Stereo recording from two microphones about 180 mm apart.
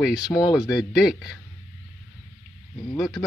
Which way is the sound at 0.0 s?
5° right (ahead or behind).